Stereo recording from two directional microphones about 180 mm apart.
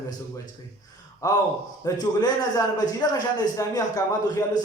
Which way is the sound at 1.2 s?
20° left (ahead or behind).